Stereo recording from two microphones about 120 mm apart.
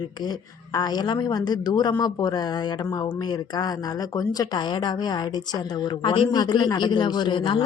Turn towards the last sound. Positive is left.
turn(degrees=40)  # may be behind; listen again after turning